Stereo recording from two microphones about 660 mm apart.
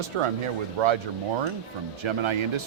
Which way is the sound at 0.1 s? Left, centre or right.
Right.